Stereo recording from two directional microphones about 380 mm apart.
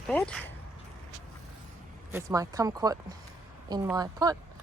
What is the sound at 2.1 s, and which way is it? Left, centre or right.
Speech, centre.